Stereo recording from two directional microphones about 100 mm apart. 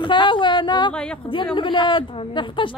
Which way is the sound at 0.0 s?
55° left (ahead or behind).